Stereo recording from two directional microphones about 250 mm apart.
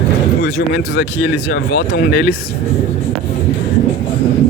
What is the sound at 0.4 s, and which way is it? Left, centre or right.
Speech, left.